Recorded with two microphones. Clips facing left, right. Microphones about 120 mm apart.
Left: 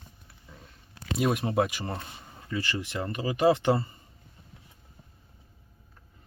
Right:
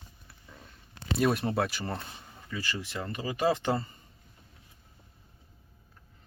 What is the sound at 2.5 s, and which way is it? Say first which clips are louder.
Speech: left 4 dB; 20° left (ahead or behind).